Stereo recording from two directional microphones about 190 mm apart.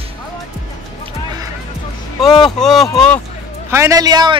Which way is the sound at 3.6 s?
15° right (ahead or behind).